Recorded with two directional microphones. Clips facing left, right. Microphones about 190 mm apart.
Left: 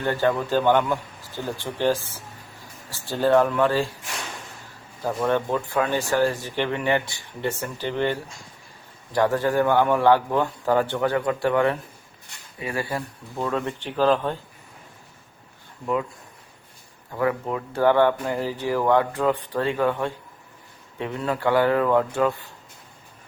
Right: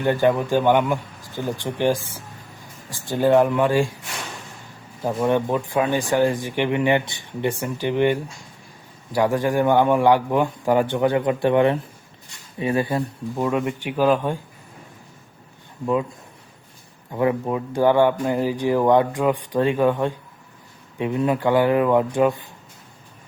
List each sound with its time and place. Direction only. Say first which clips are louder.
0.0 s speech: right 4 dB; 15° right (ahead or behind)
5.0 s speech: right 3 dB; 15° right (ahead or behind)
17.1 s speech: right 3 dB; 20° right (ahead or behind)